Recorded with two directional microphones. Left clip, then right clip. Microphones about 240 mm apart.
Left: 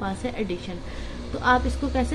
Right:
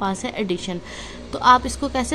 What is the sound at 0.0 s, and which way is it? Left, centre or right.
Speech, right.